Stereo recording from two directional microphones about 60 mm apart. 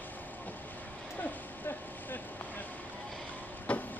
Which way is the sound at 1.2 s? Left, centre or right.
Left.